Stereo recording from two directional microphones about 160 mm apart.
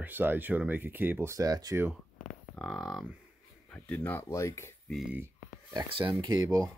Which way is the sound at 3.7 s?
10° left (ahead or behind).